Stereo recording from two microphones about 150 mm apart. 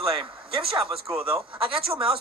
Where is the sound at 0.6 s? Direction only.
35° right (ahead or behind).